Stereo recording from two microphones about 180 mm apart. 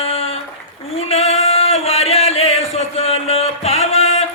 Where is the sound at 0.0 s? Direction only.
35° left (ahead or behind).